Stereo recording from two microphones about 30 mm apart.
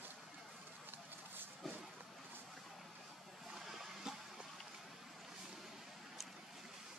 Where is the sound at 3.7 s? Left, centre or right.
Centre.